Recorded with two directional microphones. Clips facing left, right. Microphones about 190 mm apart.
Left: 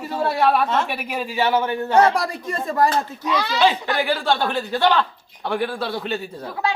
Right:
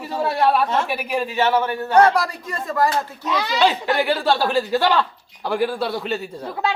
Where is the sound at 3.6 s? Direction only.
Centre (ahead or behind).